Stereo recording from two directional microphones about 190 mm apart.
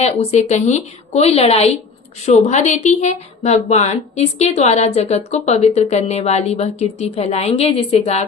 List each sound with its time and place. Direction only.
0.0 s a woman's voice: 35° left (ahead or behind)